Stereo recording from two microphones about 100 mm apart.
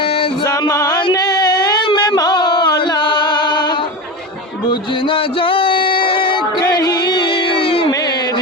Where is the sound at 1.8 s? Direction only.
55° left (ahead or behind).